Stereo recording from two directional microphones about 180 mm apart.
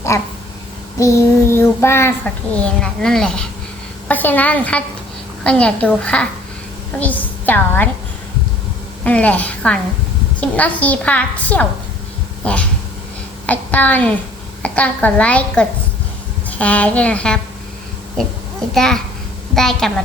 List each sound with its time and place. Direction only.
0.1 s child singing: 15° left (ahead or behind)
2.8 s a woman's voice: 5° left (ahead or behind)
4.1 s child singing: 10° left (ahead or behind)
9.0 s child singing: 10° left (ahead or behind)
13.5 s a woman's voice: 10° left (ahead or behind)
14.6 s child singing: 5° left (ahead or behind)
18.7 s a woman's voice: centre (ahead or behind)